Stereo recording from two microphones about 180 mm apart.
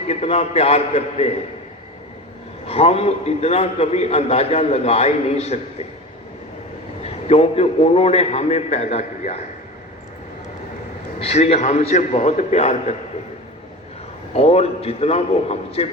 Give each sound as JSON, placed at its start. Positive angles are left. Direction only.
{"t": 0.1, "sound": "a man's voice", "side_deg": 35}
{"t": 2.6, "sound": "a man's voice", "side_deg": 35}
{"t": 7.0, "sound": "a man's voice", "side_deg": 35}
{"t": 11.2, "sound": "a man's voice", "side_deg": 35}
{"t": 14.3, "sound": "a man's voice", "side_deg": 35}